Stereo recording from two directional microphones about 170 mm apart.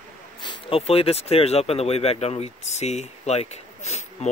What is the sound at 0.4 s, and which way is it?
Speech, 30° left (ahead or behind).